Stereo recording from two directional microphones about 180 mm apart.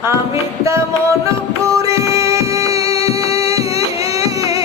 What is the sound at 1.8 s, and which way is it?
Music, 20° right (ahead or behind).